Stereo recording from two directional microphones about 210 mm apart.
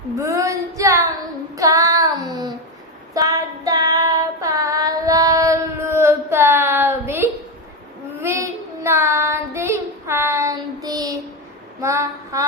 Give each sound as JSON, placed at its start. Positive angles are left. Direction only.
{"t": 0.2, "sound": "female singing", "side_deg": -15}
{"t": 1.5, "sound": "child singing", "side_deg": -15}
{"t": 3.2, "sound": "female singing", "side_deg": -15}
{"t": 8.2, "sound": "child singing", "side_deg": -10}
{"t": 11.8, "sound": "female singing", "side_deg": -15}